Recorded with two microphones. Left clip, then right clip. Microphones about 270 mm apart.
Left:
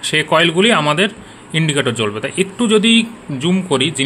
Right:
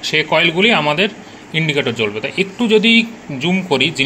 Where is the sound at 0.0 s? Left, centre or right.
Left.